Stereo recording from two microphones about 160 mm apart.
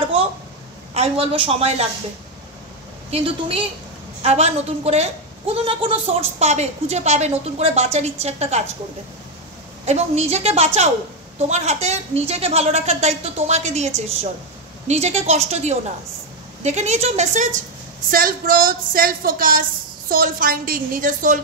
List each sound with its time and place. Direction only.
0.9 s a woman's voice: 40° right (ahead or behind)
3.1 s a woman's voice: 35° right (ahead or behind)
9.8 s a woman's voice: 45° right (ahead or behind)
18.1 s music: 60° right (ahead or behind)